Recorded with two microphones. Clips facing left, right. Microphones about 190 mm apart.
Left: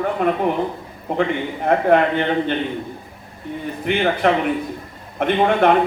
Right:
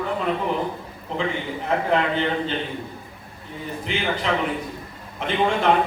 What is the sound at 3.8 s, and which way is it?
A man's voice, 60° left (ahead or behind).